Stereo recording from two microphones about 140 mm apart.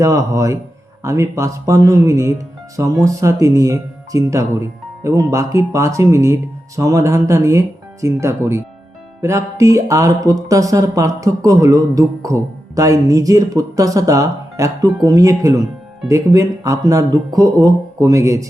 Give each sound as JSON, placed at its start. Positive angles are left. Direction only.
{"t": 0.0, "sound": "speech", "side_deg": -25}